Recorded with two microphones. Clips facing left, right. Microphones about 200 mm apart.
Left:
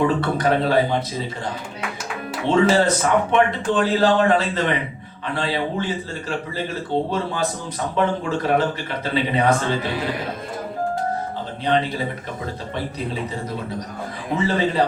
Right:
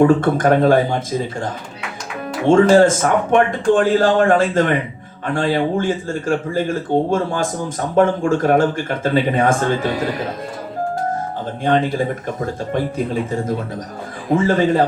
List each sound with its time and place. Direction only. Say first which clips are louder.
0.0 s a man's voice: right 6 dB; 45° right (ahead or behind)
2.5 s a man's voice: right 6 dB; 45° right (ahead or behind)
11.6 s a man's voice: right 4 dB; 45° right (ahead or behind)
14.3 s a man's voice: right 5 dB; 50° right (ahead or behind)